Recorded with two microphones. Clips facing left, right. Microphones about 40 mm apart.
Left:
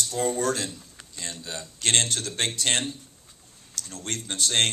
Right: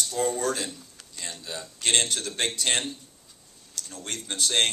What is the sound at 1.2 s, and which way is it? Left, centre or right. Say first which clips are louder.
A man's voice: even; right.